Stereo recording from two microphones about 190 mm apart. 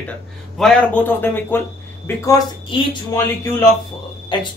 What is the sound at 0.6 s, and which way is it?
A man's voice, 5° left (ahead or behind).